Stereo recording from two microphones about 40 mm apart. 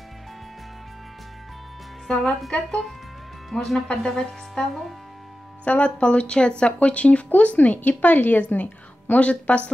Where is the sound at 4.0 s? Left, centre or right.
Centre.